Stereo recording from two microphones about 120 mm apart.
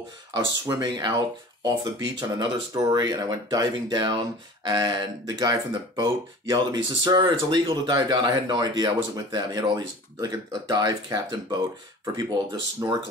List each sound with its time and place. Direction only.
0.3 s speech: 35° right (ahead or behind)